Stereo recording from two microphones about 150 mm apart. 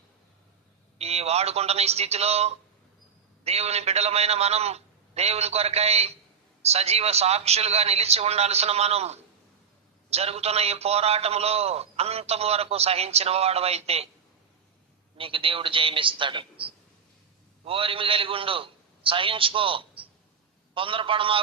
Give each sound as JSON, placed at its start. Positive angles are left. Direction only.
{"t": 0.9, "sound": "a man's voice", "side_deg": -45}
{"t": 15.2, "sound": "a man's voice", "side_deg": -35}